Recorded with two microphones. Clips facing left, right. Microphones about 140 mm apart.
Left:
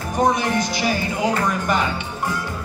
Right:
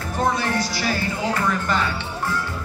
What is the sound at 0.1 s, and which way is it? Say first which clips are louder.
Music: left 3 dB; 15° left (ahead or behind).